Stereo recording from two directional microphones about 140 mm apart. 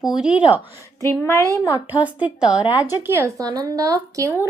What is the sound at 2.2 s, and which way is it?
Speech, 5° right (ahead or behind).